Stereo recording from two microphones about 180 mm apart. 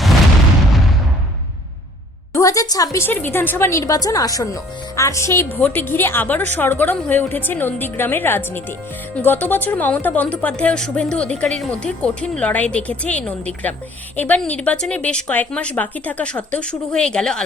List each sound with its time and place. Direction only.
2.3 s speech: 20° left (ahead or behind)